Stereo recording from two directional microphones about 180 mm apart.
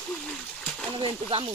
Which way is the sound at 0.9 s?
30° right (ahead or behind).